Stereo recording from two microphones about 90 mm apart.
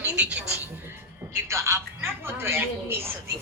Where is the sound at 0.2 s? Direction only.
15° right (ahead or behind).